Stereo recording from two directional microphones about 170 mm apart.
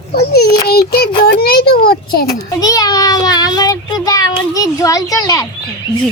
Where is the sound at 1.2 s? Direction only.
65° left (ahead or behind).